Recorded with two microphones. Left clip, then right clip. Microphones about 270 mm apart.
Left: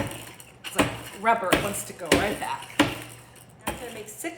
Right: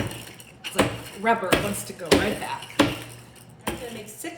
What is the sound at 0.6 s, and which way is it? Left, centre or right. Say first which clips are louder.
Speech: right 1 dB; centre.